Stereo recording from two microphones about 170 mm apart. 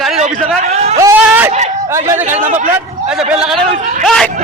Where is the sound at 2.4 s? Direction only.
45° right (ahead or behind).